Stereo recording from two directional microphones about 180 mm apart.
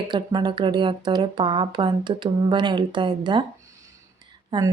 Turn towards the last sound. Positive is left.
turn(degrees=-25)  # may be behind; listen again after turning